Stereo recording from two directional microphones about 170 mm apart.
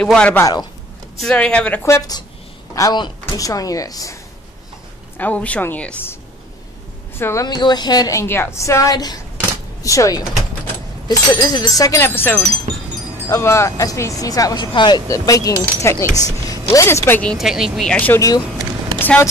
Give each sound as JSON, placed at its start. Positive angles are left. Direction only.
{"t": 0.0, "sound": "speech", "side_deg": 5}
{"t": 5.1, "sound": "speech", "side_deg": 10}
{"t": 7.2, "sound": "speech", "side_deg": 15}
{"t": 16.2, "sound": "a sound", "side_deg": 20}
{"t": 16.6, "sound": "speech", "side_deg": 15}
{"t": 18.9, "sound": "vehicle", "side_deg": 10}